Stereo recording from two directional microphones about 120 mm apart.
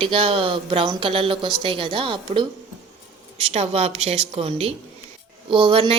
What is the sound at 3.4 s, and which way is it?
Speech, 55° right (ahead or behind).